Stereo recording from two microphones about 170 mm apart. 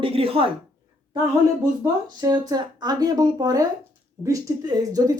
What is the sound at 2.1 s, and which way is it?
Speech, 25° right (ahead or behind).